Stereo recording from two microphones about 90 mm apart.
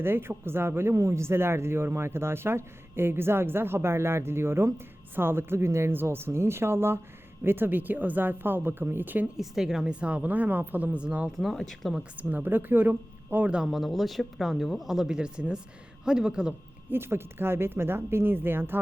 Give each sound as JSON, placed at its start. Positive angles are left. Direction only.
{"t": 0.0, "sound": "speech", "side_deg": -25}
{"t": 9.4, "sound": "speech", "side_deg": -5}
{"t": 11.3, "sound": "speech", "side_deg": 5}
{"t": 12.1, "sound": "speech", "side_deg": -20}
{"t": 16.9, "sound": "speech", "side_deg": -25}